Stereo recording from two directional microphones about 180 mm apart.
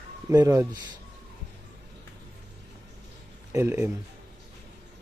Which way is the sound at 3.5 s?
15° right (ahead or behind).